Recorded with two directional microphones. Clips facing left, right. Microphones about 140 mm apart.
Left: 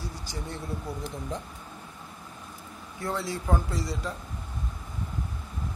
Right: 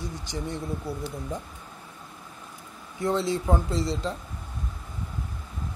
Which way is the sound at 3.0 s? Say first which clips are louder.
Right 6 dB; 20° right (ahead or behind).